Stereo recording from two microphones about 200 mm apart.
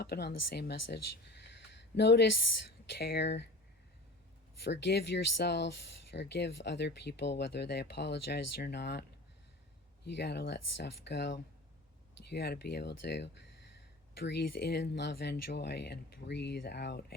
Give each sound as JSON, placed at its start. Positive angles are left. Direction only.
{"t": 0.0, "sound": "speech", "side_deg": 55}
{"t": 4.6, "sound": "speech", "side_deg": 55}